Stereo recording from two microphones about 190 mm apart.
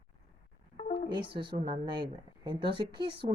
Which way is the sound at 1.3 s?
25° right (ahead or behind).